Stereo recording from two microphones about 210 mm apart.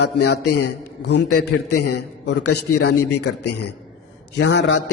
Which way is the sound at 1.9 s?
55° left (ahead or behind).